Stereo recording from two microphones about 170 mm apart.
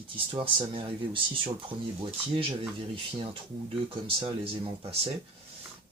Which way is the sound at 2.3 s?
30° right (ahead or behind).